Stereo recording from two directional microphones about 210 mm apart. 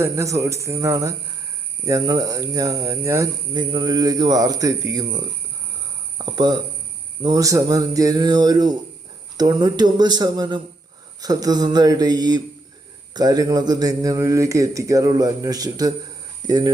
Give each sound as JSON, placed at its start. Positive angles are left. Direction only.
{"t": 0.0, "sound": "speech", "side_deg": -15}